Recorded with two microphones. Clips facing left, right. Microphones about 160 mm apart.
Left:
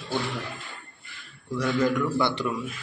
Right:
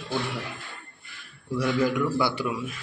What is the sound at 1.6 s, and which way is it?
Speech, 10° right (ahead or behind).